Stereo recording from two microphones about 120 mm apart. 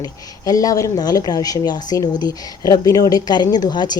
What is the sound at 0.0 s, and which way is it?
A woman's voice, 30° left (ahead or behind).